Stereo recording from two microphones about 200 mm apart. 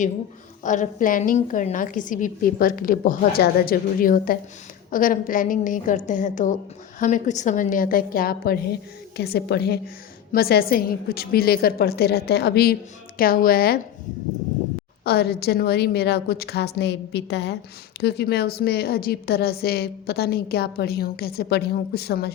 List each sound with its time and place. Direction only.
0.6 s a woman's voice: 40° left (ahead or behind)
15.0 s a woman's voice: 50° left (ahead or behind)